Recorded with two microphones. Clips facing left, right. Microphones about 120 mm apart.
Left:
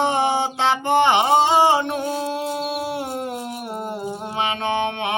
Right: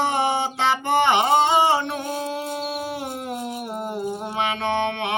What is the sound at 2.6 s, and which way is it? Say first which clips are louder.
Music: left 3 dB; centre (ahead or behind).